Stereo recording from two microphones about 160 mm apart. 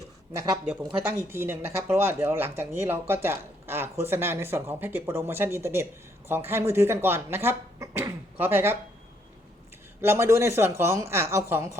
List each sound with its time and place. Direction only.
0.8 s speech: 30° right (ahead or behind)
1.3 s speech: 15° right (ahead or behind)
10.0 s speech: 15° right (ahead or behind)